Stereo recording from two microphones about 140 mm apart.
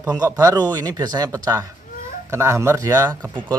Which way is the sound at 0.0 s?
25° right (ahead or behind).